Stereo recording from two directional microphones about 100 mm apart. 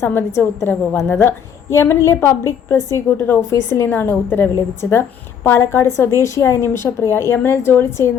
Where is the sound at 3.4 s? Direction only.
30° left (ahead or behind).